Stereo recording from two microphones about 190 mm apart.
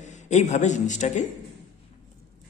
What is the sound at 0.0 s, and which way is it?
A man's voice, 40° left (ahead or behind).